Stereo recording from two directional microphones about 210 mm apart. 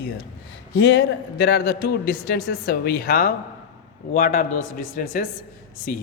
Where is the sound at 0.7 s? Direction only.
60° left (ahead or behind); by 5.0 s 40° left (ahead or behind).